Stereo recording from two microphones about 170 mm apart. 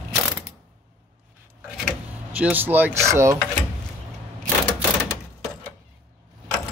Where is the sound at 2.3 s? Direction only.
10° right (ahead or behind).